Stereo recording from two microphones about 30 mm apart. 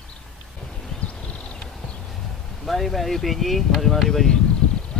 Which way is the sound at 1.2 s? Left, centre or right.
Left.